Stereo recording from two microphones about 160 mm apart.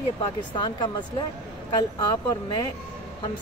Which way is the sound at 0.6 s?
30° left (ahead or behind).